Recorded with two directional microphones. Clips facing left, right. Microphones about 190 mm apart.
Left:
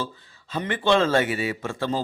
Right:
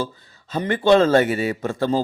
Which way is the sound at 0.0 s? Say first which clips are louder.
Right 4 dB; 40° right (ahead or behind).